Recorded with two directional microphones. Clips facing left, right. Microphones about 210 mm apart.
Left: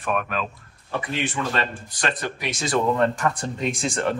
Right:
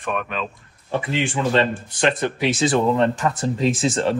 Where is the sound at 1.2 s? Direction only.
25° right (ahead or behind).